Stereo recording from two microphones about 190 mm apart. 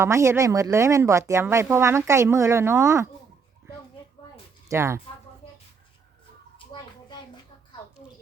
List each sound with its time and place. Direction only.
0.0 s speech: 15° right (ahead or behind)
4.7 s speech: 15° right (ahead or behind)
6.6 s a sound: 25° left (ahead or behind)